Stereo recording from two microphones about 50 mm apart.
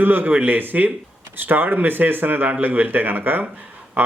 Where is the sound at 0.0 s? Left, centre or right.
Right.